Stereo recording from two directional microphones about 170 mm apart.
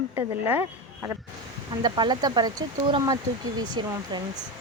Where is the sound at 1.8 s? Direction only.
25° right (ahead or behind).